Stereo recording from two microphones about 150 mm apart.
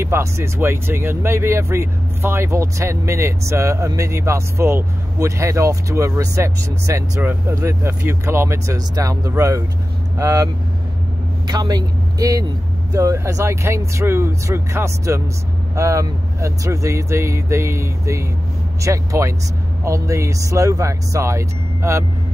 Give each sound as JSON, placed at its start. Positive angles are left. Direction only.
{"t": 0.0, "sound": "speech", "side_deg": -15}